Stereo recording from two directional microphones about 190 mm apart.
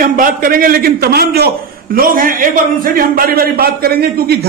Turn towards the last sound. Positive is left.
turn(degrees=-55)  # may be behind; listen again after turning